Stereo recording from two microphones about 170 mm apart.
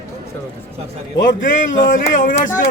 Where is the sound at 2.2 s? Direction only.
50° left (ahead or behind).